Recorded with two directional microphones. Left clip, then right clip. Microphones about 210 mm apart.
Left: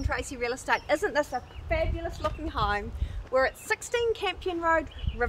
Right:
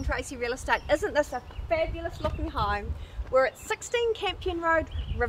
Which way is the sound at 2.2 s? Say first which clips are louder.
Even; 30° left (ahead or behind).